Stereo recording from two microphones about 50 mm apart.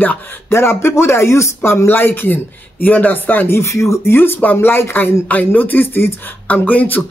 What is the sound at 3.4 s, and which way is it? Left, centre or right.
Speech, left.